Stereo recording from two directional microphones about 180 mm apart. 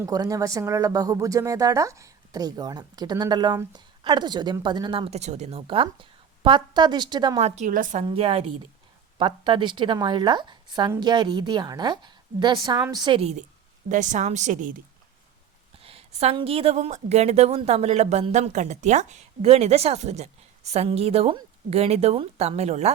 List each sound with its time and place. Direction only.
0.0 s speech: 20° right (ahead or behind)
7.3 s a woman's voice: 35° right (ahead or behind)
8.0 s a woman's voice: 30° right (ahead or behind)
15.8 s a woman's voice: 30° right (ahead or behind)